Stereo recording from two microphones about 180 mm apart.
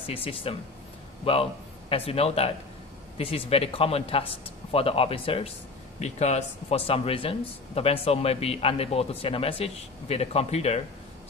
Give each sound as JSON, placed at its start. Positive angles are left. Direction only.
{"t": 0.0, "sound": "a man's voice", "side_deg": 30}